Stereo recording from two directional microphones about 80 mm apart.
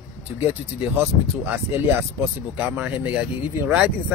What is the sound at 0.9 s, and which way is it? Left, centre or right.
Speech, right.